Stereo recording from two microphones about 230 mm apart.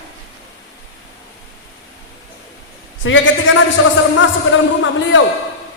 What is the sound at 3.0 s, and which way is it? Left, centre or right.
A man's voice, left.